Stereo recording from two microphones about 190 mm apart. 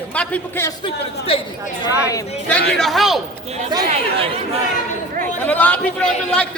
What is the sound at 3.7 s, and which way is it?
Speech, 20° right (ahead or behind).